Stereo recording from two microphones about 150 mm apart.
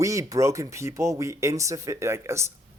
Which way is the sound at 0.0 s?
20° right (ahead or behind).